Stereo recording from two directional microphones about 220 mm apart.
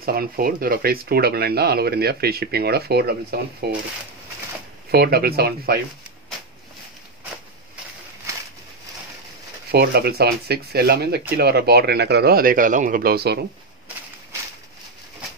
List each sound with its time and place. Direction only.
0.0 s speech: 45° right (ahead or behind)
4.9 s speech: 45° right (ahead or behind)
9.7 s speech: 45° right (ahead or behind)